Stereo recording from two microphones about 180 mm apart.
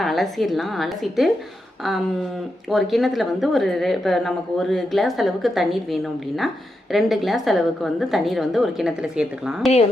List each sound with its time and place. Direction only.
0.0 s a woman's voice: centre (ahead or behind)
2.6 s a woman's voice: centre (ahead or behind)